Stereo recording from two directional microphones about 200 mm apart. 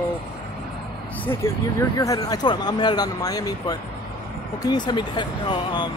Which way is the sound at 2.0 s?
15° left (ahead or behind).